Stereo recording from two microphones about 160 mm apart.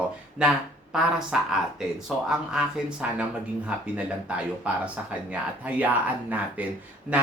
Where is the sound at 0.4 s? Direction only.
5° right (ahead or behind).